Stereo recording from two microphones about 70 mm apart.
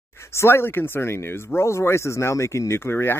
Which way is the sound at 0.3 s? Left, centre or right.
Left.